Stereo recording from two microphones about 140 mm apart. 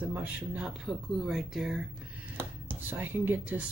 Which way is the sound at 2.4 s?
15° right (ahead or behind).